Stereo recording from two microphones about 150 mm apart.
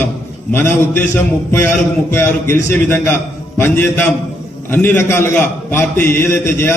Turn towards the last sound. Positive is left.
turn(degrees=15)  # may be behind; listen again after turning